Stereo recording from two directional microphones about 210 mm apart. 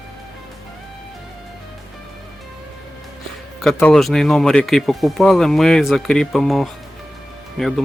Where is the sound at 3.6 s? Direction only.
5° left (ahead or behind).